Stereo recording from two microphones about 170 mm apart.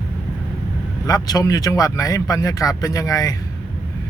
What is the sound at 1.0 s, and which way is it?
Speech, 20° left (ahead or behind).